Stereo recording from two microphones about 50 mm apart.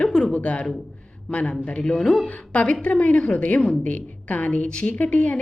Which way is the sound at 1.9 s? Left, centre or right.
Centre.